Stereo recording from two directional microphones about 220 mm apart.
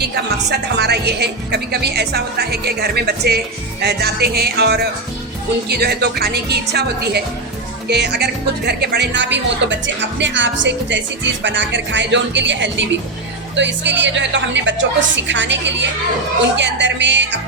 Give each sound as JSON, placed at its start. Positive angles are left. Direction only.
{"t": 0.5, "sound": "a woman's voice", "side_deg": -50}